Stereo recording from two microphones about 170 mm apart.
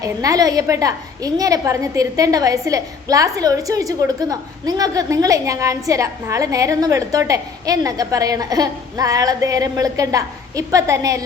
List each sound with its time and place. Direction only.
0.0 s a woman's voice: 20° right (ahead or behind)